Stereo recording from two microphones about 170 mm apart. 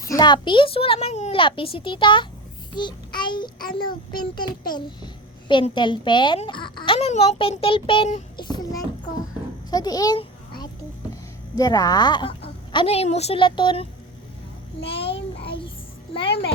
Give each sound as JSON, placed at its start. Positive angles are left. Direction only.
{"t": 0.0, "sound": "a woman's voice", "side_deg": 20}
{"t": 8.4, "sound": "a sound", "side_deg": 25}
{"t": 9.6, "sound": "a woman's voice", "side_deg": 25}
{"t": 11.5, "sound": "a woman's voice", "side_deg": 20}
{"t": 12.7, "sound": "a woman's voice", "side_deg": 35}
{"t": 14.8, "sound": "a child's voice", "side_deg": 35}
{"t": 15.4, "sound": "music", "side_deg": 30}
{"t": 16.2, "sound": "music", "side_deg": 70}